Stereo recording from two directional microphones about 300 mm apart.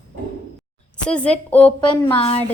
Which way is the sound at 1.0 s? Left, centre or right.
Centre.